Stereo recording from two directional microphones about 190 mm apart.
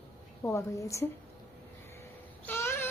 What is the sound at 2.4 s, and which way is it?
Babbling, 15° left (ahead or behind).